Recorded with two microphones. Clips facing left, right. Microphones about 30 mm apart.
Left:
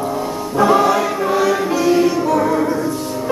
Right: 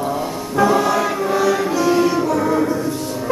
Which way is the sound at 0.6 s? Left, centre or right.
Centre.